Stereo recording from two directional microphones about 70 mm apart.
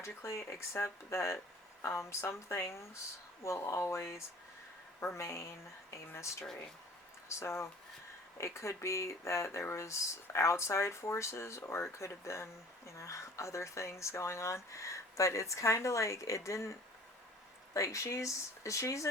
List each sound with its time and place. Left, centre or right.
0.0 s speech: left
7.3 s speech: left
17.7 s speech: left